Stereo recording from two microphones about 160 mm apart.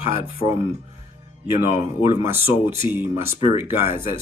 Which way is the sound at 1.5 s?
15° right (ahead or behind).